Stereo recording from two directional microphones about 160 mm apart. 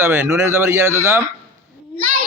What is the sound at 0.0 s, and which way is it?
A man's voice, 15° right (ahead or behind).